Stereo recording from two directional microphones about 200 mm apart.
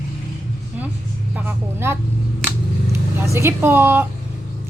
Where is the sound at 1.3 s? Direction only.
10° right (ahead or behind).